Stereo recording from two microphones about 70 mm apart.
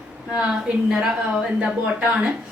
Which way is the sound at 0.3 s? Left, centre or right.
Centre.